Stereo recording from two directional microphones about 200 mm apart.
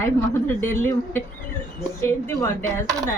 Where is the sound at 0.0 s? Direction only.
10° left (ahead or behind).